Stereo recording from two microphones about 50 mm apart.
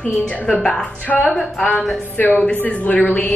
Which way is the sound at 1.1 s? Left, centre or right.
Centre.